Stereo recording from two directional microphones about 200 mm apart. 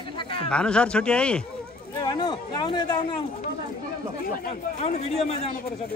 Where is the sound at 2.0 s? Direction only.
20° left (ahead or behind).